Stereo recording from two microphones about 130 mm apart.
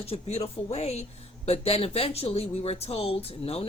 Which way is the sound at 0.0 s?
55° left (ahead or behind).